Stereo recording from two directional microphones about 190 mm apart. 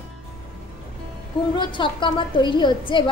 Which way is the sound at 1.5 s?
25° left (ahead or behind).